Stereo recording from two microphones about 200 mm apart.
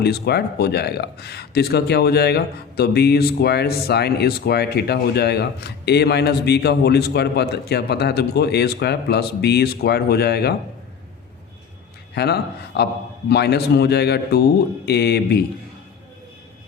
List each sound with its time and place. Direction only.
0.0 s speech: 55° left (ahead or behind)
12.1 s a man's voice: 55° left (ahead or behind)